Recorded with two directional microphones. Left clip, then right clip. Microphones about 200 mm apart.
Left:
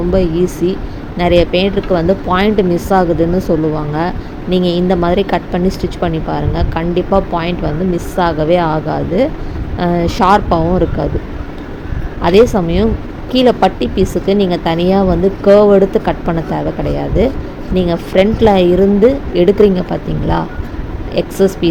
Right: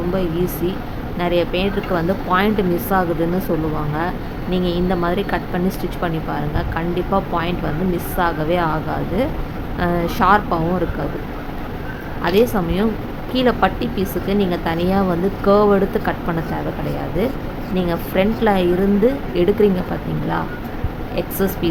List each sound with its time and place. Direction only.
0.1 s speech: 20° left (ahead or behind)
4.5 s speech: 25° left (ahead or behind)
12.2 s speech: 20° left (ahead or behind)
21.2 s speech: 20° left (ahead or behind)